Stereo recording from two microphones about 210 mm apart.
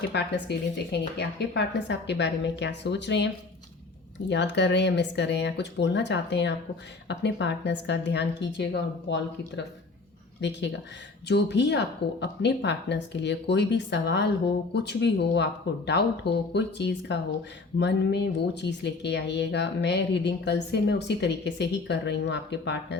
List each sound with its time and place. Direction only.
0.1 s speech: 55° left (ahead or behind)
4.3 s speech: 55° left (ahead or behind)